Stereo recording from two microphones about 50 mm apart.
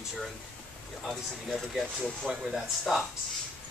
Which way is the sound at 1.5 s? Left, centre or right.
Centre.